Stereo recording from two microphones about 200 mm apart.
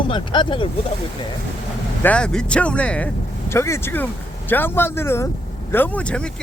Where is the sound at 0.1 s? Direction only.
25° left (ahead or behind).